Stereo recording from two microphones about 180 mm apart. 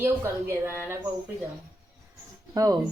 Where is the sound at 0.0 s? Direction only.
15° right (ahead or behind).